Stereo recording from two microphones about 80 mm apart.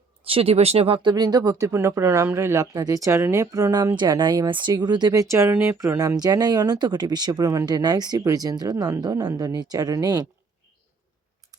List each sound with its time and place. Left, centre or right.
0.5 s speech: right
0.9 s speech: right
2.7 s speech: right
3.9 s speech: right
4.4 s speech: right
4.7 s speech: right
5.5 s speech: right
5.7 s speech: right
6.1 s speech: right